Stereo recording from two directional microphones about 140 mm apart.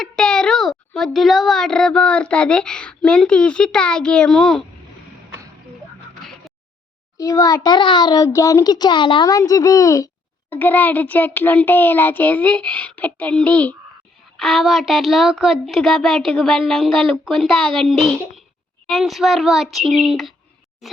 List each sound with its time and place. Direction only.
0.0 s a child's voice: 5° left (ahead or behind)
7.2 s a child's voice: 25° left (ahead or behind)
10.5 s a child's voice: 10° left (ahead or behind)
20.8 s a sound: centre (ahead or behind)